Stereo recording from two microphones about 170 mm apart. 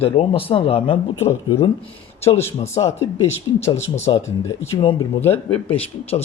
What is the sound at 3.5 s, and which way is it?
Speech, 30° left (ahead or behind).